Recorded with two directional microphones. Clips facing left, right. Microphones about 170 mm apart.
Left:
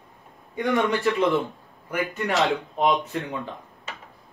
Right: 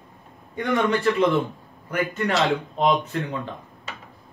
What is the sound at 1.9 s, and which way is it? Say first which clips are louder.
Speech: right 2 dB; 15° left (ahead or behind).